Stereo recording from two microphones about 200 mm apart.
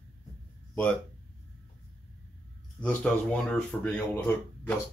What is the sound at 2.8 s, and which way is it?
Speech, 5° left (ahead or behind).